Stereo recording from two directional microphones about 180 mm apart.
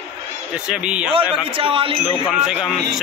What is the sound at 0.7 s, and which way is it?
Speech, 5° right (ahead or behind).